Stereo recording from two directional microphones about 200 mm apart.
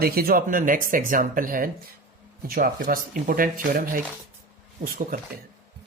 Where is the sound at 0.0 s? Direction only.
50° right (ahead or behind).